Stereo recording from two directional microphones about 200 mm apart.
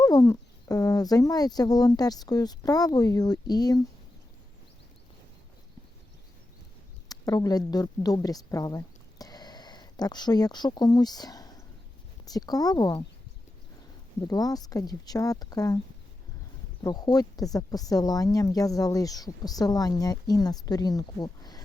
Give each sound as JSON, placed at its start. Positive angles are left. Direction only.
{"t": 0.0, "sound": "speech", "side_deg": 15}
{"t": 7.1, "sound": "a woman's voice", "side_deg": 20}
{"t": 14.2, "sound": "speech", "side_deg": 20}
{"t": 16.8, "sound": "speech", "side_deg": 20}